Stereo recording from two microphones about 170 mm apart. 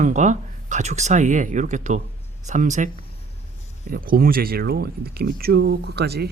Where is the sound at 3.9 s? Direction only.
60° right (ahead or behind).